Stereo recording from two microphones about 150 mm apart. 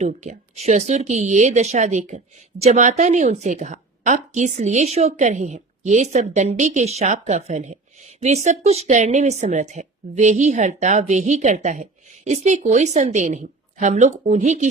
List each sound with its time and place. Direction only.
0.1 s a woman's voice: 50° right (ahead or behind)